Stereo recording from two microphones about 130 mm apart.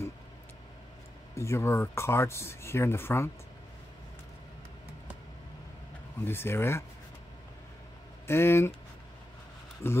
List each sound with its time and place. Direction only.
1.3 s speech: 20° left (ahead or behind)
6.2 s speech: 15° left (ahead or behind)
8.3 s speech: 20° left (ahead or behind)
9.8 s speech: 20° left (ahead or behind)